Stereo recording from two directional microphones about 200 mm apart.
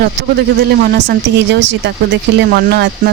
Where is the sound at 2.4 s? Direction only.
50° right (ahead or behind).